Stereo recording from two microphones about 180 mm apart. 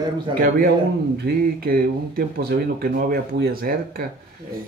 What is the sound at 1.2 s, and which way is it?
A man's voice, 55° right (ahead or behind).